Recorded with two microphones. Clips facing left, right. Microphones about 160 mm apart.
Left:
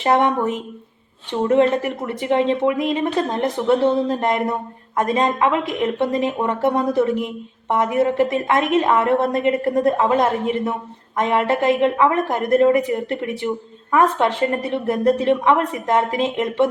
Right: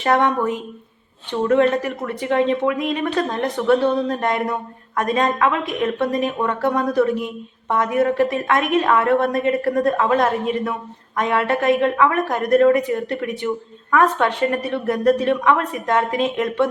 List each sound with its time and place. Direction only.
0.0 s a woman's voice: 25° left (ahead or behind)